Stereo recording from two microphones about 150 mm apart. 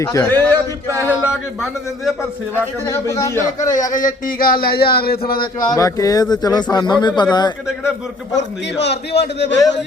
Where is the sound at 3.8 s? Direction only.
60° left (ahead or behind); by 5.2 s 90° left.